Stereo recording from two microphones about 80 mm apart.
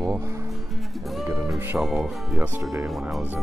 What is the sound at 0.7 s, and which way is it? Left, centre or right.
Music, centre.